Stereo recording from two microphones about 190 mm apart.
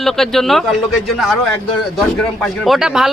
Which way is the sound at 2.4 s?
Centre (ahead or behind).